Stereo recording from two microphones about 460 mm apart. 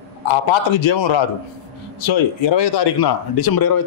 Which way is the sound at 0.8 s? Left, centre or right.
Left.